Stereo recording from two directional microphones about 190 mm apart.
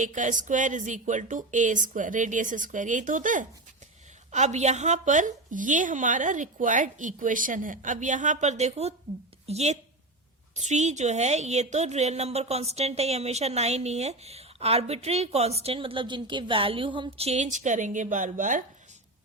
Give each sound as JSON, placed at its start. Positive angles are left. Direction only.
{"t": 0.0, "sound": "a woman's voice", "side_deg": -40}